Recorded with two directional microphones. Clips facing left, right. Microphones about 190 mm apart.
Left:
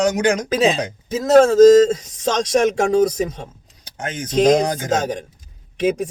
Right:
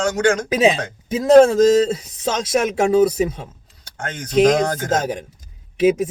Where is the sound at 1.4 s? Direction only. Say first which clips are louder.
Left 3 dB; 10° right (ahead or behind).